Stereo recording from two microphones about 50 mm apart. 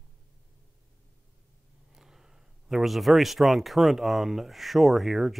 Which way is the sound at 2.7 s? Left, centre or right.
Centre.